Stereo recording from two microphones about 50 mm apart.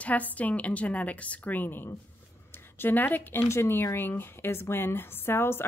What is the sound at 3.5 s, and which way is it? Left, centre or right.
A woman's voice, left.